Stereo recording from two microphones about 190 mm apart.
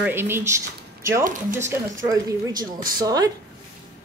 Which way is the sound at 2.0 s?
20° right (ahead or behind).